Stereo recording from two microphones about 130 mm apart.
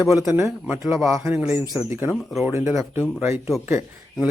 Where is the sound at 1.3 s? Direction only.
15° right (ahead or behind).